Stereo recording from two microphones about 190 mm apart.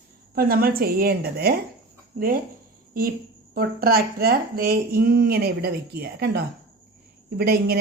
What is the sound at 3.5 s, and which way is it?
A woman's voice, 50° right (ahead or behind).